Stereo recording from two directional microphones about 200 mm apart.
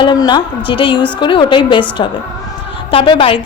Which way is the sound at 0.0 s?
20° left (ahead or behind).